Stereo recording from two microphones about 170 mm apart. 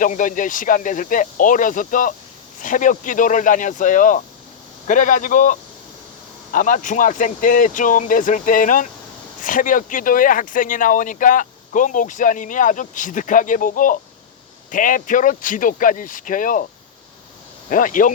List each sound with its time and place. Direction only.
0.0 s speech: 50° left (ahead or behind)
17.7 s speech: 50° left (ahead or behind)